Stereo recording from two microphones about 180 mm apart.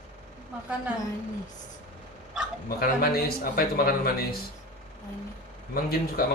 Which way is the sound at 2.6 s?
55° left (ahead or behind).